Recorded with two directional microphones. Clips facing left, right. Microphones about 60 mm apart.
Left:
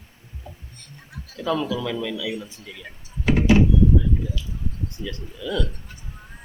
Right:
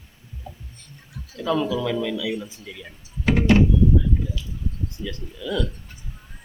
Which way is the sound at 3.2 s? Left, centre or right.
Right.